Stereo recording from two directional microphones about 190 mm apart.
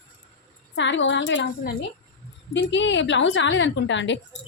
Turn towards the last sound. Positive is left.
turn(degrees=70)  # may be behind; listen again after turning